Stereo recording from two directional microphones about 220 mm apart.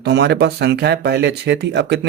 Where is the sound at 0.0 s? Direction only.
50° right (ahead or behind).